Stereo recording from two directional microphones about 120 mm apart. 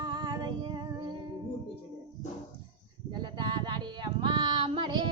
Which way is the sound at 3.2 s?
40° right (ahead or behind).